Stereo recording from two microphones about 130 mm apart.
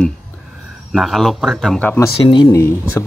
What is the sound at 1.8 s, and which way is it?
Speech, 15° left (ahead or behind).